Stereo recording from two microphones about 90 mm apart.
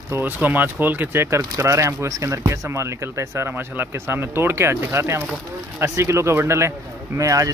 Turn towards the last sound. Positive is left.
turn(degrees=-35)  # may be behind; listen again after turning